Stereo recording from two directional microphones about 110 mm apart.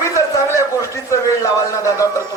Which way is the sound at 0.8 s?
30° left (ahead or behind).